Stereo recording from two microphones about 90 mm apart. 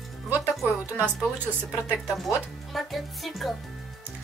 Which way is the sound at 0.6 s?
20° right (ahead or behind).